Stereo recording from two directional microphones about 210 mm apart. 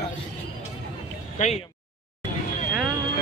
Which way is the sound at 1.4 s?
35° left (ahead or behind).